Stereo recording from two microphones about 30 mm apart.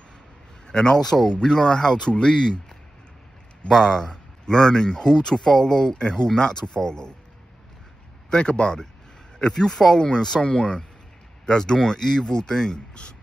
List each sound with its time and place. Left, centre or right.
0.7 s a man's voice: left
0.9 s speech: centre
2.0 s speech: left
3.8 s speech: left
8.3 s speech: left
9.6 s speech: centre
9.9 s speech: left
12.0 s speech: centre; by 13.1 s left